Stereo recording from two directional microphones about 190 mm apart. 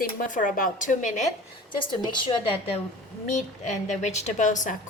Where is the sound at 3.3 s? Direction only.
40° left (ahead or behind).